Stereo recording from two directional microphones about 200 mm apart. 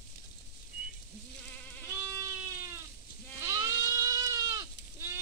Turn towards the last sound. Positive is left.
turn(degrees=-15)  # may be behind; listen again after turning